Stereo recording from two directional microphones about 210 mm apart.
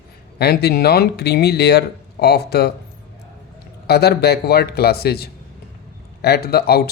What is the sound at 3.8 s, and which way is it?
Speech, 50° left (ahead or behind).